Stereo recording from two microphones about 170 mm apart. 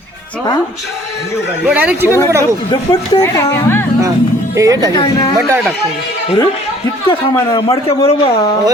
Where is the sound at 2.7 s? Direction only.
20° left (ahead or behind).